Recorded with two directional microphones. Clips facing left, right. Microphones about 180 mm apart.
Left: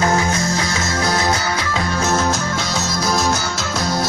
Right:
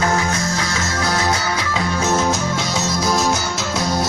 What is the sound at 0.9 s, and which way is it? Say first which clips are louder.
Music: left 2 dB; 15° left (ahead or behind).